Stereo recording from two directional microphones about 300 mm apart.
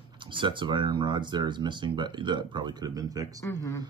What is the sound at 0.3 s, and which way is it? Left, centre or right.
Speech, centre.